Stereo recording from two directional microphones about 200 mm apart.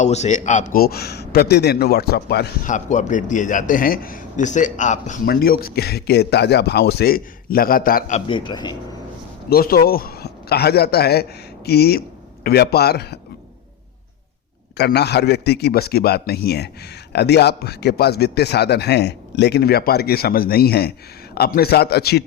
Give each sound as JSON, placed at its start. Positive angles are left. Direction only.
{"t": 0.0, "sound": "a man's voice", "side_deg": 35}
{"t": 2.6, "sound": "a man's voice", "side_deg": 40}
{"t": 8.3, "sound": "speech", "side_deg": 20}
{"t": 9.5, "sound": "a man's voice", "side_deg": 50}
{"t": 14.8, "sound": "a man's voice", "side_deg": 55}